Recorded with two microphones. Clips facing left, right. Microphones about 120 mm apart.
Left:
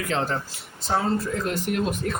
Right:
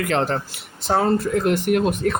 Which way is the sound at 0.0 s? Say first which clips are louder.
Right 5 dB; 65° right (ahead or behind).